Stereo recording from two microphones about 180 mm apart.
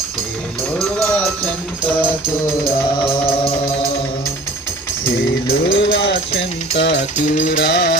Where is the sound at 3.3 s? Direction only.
30° left (ahead or behind).